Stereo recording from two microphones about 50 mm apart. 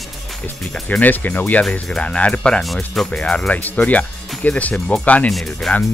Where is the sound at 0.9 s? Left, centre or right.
Left.